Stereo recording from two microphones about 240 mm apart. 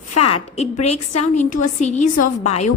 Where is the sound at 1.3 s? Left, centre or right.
Left.